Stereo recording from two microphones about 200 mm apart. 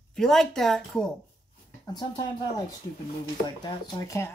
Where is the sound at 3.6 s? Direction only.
15° left (ahead or behind).